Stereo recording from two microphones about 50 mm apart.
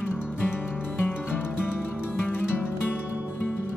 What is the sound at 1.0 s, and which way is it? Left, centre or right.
Music, left.